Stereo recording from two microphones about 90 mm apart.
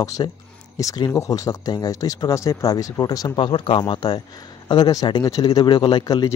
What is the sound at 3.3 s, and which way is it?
Speech, 75° left (ahead or behind).